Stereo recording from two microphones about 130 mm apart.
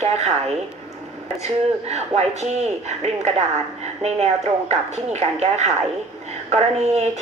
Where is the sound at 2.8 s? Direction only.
55° right (ahead or behind).